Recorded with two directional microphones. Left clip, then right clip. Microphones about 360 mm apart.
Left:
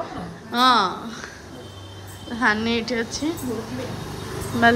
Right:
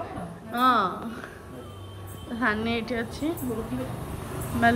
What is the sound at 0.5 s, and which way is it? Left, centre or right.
Speech, centre.